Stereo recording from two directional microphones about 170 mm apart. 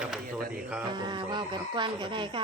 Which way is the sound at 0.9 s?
25° right (ahead or behind).